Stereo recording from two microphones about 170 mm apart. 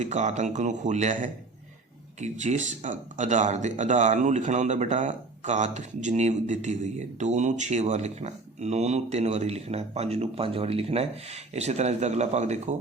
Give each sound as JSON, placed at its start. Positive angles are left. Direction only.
{"t": 0.0, "sound": "speech", "side_deg": -40}